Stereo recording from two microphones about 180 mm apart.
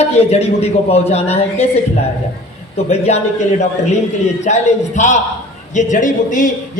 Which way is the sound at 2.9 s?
40° left (ahead or behind).